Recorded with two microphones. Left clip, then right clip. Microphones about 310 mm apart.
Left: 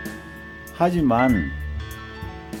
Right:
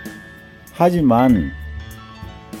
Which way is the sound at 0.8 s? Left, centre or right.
Centre.